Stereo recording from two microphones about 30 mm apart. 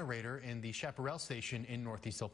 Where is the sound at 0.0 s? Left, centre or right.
Centre.